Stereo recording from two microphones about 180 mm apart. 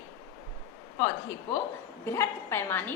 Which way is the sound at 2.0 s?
15° left (ahead or behind).